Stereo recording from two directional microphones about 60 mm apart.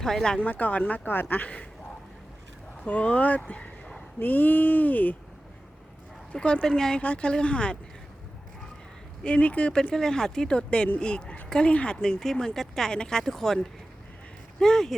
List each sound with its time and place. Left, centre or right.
0.0 s speech: centre
0.3 s speech: left
2.8 s speech: left
4.2 s speech: left
6.3 s speech: centre
7.0 s speech: centre
9.2 s speech: left
9.9 s speech: centre